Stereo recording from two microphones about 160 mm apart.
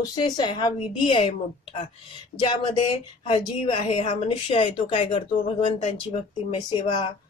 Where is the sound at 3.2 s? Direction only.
35° left (ahead or behind).